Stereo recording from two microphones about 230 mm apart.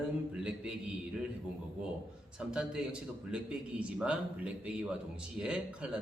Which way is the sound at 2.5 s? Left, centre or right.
Centre.